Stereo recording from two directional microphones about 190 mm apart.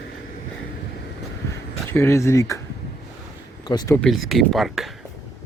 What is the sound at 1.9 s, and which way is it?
Speech, 15° left (ahead or behind).